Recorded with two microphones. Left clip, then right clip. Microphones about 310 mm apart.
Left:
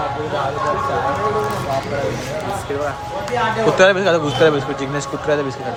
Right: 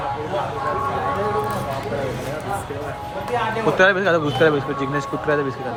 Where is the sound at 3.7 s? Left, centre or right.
Centre.